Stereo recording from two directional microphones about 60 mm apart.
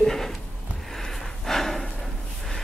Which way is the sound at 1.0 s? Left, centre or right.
Centre.